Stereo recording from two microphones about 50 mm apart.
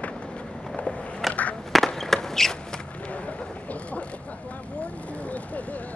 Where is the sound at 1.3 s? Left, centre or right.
Left.